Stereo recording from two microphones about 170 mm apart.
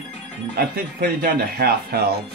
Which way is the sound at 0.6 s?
65° right (ahead or behind).